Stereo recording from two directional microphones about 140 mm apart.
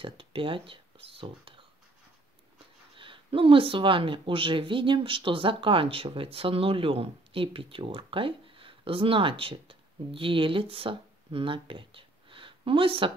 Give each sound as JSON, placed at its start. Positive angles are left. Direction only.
{"t": 0.0, "sound": "speech", "side_deg": -40}
{"t": 3.0, "sound": "speech", "side_deg": -40}